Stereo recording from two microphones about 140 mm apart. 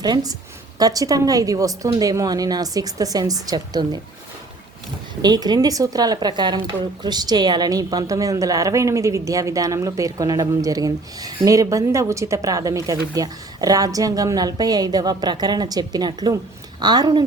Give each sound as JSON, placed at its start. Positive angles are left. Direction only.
{"t": 0.0, "sound": "a woman's voice", "side_deg": -30}
{"t": 5.2, "sound": "a woman's voice", "side_deg": -30}